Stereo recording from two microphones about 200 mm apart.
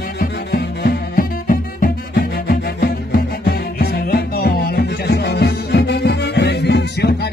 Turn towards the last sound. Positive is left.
turn(degrees=55)  # may be behind; listen again after turning